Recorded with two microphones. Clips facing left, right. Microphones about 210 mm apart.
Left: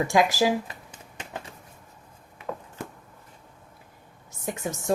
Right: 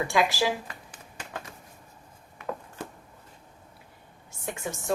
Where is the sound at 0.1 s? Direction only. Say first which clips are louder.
Left 4 dB; 45° left (ahead or behind).